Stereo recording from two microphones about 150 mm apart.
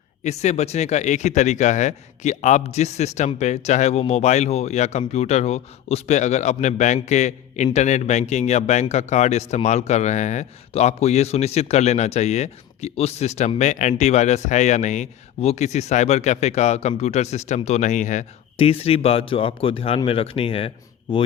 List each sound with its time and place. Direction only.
0.3 s speech: 50° left (ahead or behind)
18.5 s speech: 40° left (ahead or behind)